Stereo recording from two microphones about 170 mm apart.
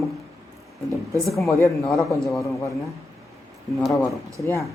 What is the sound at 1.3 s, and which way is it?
Speech, centre (ahead or behind).